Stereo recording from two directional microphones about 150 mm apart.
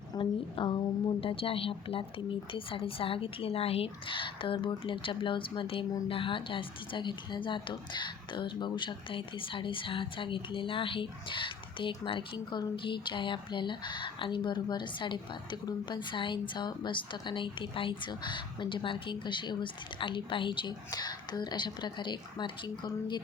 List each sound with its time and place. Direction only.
0.1 s a woman's voice: 35° left (ahead or behind)